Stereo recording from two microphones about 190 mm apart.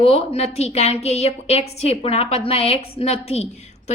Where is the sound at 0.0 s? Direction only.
30° left (ahead or behind).